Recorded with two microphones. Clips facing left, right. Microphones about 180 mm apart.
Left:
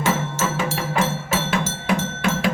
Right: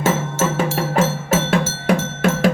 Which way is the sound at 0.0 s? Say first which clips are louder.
Right 3 dB; 45° right (ahead or behind).